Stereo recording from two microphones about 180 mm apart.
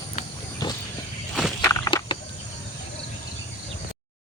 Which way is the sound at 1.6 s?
20° left (ahead or behind).